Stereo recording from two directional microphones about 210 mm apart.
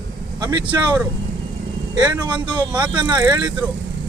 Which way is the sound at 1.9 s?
20° right (ahead or behind).